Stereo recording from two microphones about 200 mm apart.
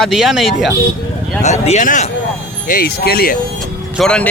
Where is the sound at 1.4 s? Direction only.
35° left (ahead or behind).